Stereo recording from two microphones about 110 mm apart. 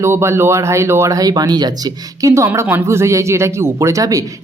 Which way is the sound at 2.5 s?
20° right (ahead or behind).